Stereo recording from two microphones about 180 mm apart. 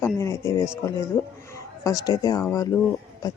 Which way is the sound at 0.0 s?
15° left (ahead or behind).